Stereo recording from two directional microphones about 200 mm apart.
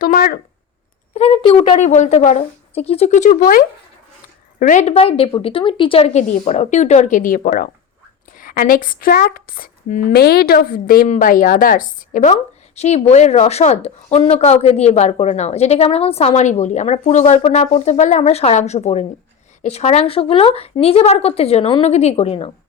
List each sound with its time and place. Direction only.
0.0 s speech: 45° left (ahead or behind)
1.1 s speech: 30° left (ahead or behind)
4.6 s speech: 35° left (ahead or behind)